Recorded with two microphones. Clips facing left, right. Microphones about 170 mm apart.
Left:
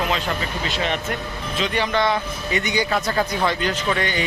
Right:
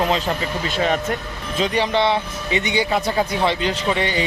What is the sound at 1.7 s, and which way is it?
Speech, 30° right (ahead or behind).